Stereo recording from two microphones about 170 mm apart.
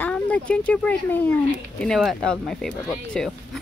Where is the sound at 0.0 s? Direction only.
5° left (ahead or behind).